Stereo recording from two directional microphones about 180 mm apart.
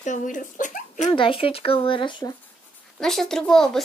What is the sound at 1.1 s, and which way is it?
Speech, 30° left (ahead or behind).